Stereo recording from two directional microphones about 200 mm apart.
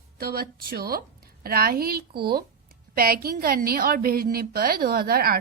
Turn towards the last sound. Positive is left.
turn(degrees=-50)  # may be behind; listen again after turning